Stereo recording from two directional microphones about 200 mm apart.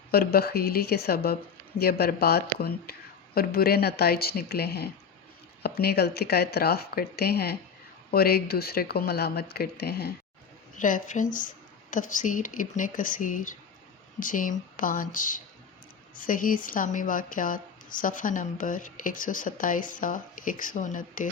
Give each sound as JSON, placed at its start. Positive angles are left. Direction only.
{"t": 0.1, "sound": "speech", "side_deg": 50}
{"t": 10.8, "sound": "a woman's voice", "side_deg": 40}